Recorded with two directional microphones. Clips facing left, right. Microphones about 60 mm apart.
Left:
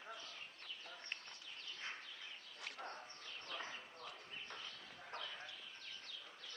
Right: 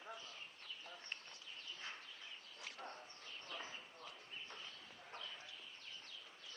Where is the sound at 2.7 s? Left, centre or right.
Left.